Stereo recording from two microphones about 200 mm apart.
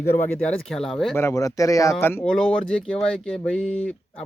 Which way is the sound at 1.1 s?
15° left (ahead or behind).